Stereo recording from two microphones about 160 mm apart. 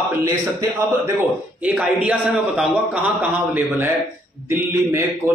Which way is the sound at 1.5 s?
10° right (ahead or behind).